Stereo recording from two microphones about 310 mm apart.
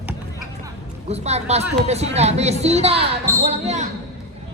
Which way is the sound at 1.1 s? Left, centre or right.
Right.